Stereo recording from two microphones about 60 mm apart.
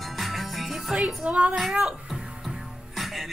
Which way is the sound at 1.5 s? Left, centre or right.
Centre.